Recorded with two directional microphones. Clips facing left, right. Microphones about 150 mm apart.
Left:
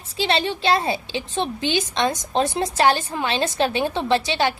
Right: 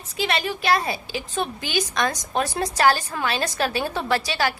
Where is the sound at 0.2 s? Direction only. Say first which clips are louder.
Left 3 dB; 30° left (ahead or behind).